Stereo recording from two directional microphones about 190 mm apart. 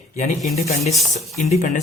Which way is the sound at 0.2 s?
35° left (ahead or behind).